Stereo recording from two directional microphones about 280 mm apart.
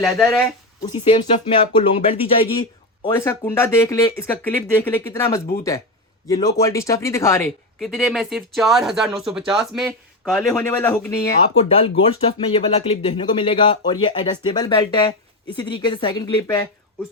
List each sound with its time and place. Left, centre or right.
0.0 s speech: centre
0.9 s speech: centre
11.7 s speech: centre